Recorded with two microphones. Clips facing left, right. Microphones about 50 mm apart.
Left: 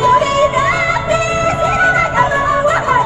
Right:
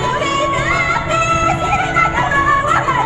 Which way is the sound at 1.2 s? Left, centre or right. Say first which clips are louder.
Even; centre.